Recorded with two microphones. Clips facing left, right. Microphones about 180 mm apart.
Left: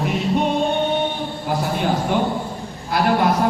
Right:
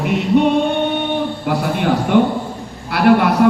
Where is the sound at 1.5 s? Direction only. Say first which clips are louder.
Right 3 dB; 65° right (ahead or behind).